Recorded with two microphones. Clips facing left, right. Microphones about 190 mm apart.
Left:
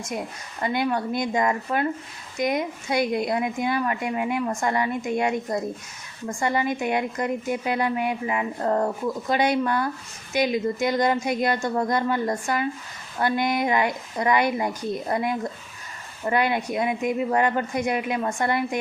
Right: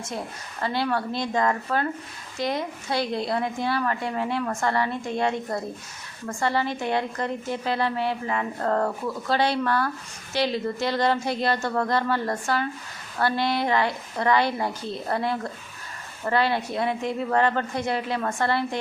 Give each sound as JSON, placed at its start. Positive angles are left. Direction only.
{"t": 0.6, "sound": "a woman's voice", "side_deg": 15}